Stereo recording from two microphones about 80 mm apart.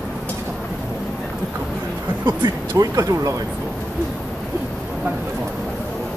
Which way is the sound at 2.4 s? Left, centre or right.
Right.